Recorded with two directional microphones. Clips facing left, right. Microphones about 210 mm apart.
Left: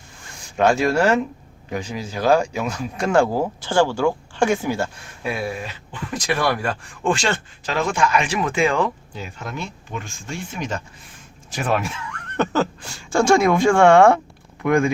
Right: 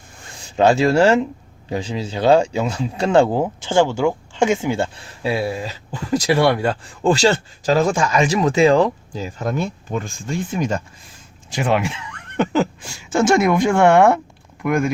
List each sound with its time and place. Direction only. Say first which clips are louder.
0.4 s speech: right 3 dB; 25° right (ahead or behind)
7.2 s speech: right 7 dB; 40° right (ahead or behind)
11.5 s speech: right 3 dB; 15° right (ahead or behind)